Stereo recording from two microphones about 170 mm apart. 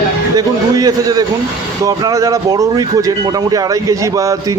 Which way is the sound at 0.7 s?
20° right (ahead or behind).